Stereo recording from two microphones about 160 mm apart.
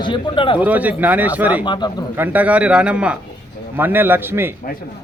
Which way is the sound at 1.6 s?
30° left (ahead or behind).